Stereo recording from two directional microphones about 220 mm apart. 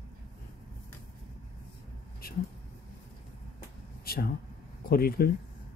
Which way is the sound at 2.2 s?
40° left (ahead or behind).